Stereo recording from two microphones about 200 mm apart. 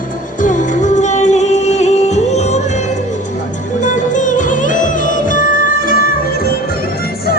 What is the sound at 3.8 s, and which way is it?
Music, 40° left (ahead or behind).